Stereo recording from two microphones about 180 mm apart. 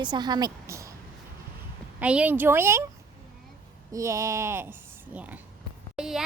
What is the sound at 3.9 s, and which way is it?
A woman's voice, 15° right (ahead or behind).